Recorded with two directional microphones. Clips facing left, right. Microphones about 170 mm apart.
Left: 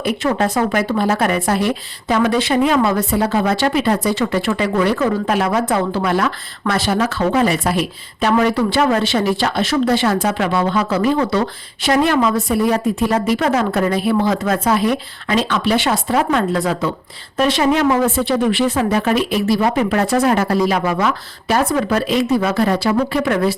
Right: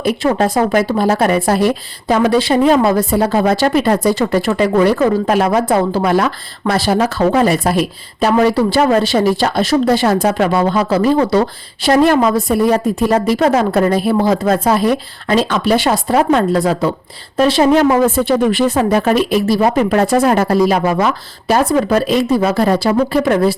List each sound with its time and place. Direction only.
0.0 s speech: 35° right (ahead or behind)